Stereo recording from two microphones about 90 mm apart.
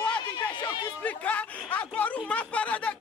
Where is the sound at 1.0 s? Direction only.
15° left (ahead or behind).